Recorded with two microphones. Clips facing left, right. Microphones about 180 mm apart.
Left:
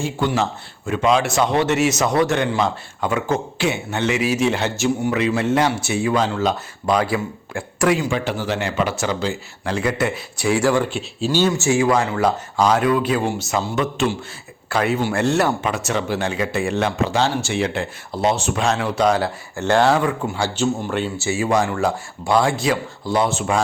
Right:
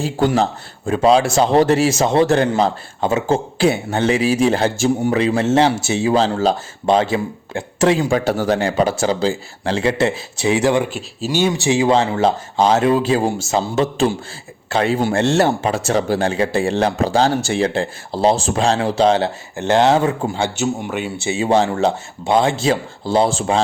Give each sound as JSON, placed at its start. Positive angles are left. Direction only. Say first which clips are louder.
{"t": 0.0, "sound": "a man's voice", "louder": "right 4 dB", "side_deg": -40}
{"t": 7.9, "sound": "a man's voice", "louder": "right 5 dB", "side_deg": -45}
{"t": 20.6, "sound": "speech", "louder": "even", "side_deg": -10}
{"t": 21.3, "sound": "speech", "louder": "right 4 dB", "side_deg": -25}